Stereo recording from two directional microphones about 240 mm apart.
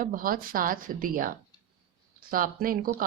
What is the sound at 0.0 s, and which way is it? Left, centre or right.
A woman's voice, right.